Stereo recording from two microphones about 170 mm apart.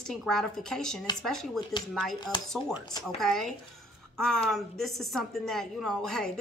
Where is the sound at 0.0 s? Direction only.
Centre (ahead or behind).